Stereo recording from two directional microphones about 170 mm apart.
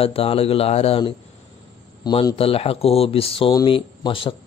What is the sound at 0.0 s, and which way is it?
Speech, 35° left (ahead or behind).